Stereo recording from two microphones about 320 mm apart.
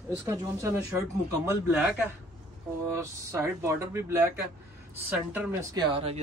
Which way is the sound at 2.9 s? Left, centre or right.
Centre.